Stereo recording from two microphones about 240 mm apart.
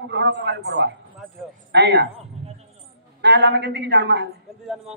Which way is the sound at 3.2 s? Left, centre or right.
Right.